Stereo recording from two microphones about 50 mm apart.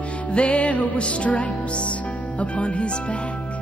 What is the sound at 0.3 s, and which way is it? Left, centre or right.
Music, left.